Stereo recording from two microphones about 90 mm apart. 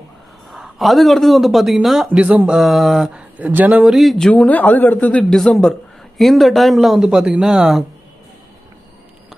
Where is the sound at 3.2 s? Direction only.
15° right (ahead or behind).